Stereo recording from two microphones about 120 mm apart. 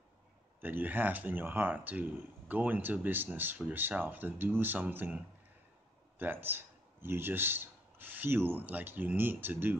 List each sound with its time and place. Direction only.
0.6 s speech: 15° right (ahead or behind)